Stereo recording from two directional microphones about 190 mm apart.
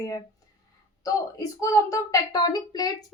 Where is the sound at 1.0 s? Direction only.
20° left (ahead or behind).